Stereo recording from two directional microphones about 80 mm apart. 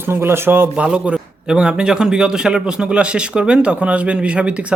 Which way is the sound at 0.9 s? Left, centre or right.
Centre.